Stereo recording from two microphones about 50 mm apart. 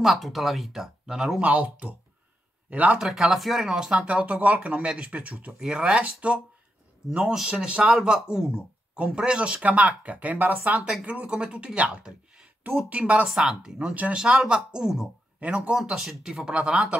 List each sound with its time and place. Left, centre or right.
0.0 s speech: centre
1.4 s speech: right
3.0 s speech: centre; by 5.3 s right
5.6 s speech: centre
7.4 s speech: centre
13.3 s speech: centre
15.4 s speech: right
15.8 s speech: centre